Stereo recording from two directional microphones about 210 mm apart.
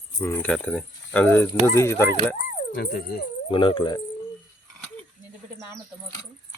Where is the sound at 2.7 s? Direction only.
50° left (ahead or behind).